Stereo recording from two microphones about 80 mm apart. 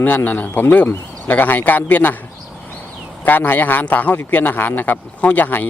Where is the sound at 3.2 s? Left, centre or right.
Left.